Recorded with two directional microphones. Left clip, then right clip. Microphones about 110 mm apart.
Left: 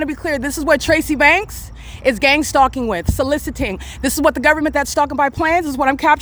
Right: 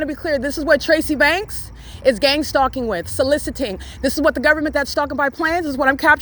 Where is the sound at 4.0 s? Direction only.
50° left (ahead or behind); by 5.9 s 30° left (ahead or behind).